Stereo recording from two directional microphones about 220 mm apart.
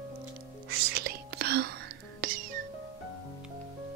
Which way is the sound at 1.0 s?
45° right (ahead or behind).